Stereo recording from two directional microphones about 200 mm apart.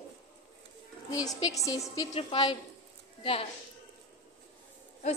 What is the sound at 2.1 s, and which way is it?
Child singing, 25° left (ahead or behind).